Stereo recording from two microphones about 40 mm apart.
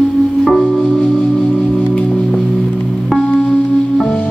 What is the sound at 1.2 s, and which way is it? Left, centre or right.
Singing bowl, centre.